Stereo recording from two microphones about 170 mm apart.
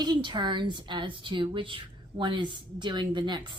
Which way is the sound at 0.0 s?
25° right (ahead or behind).